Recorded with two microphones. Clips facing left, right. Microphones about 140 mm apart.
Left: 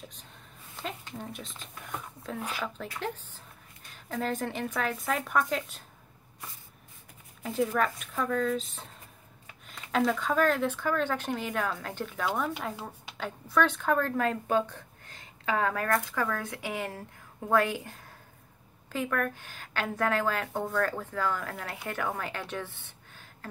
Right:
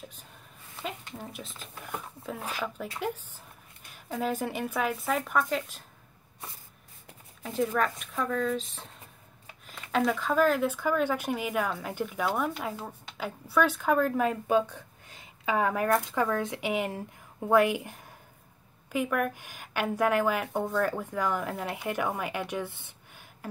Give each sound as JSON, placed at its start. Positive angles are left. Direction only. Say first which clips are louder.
{"t": 0.7, "sound": "speech", "louder": "even", "side_deg": 0}
{"t": 3.9, "sound": "speech", "louder": "right 1 dB", "side_deg": -10}
{"t": 7.4, "sound": "speech", "louder": "even", "side_deg": 0}
{"t": 12.5, "sound": "speech", "louder": "right 1 dB", "side_deg": 5}
{"t": 13.2, "sound": "speech", "louder": "right 1 dB", "side_deg": -10}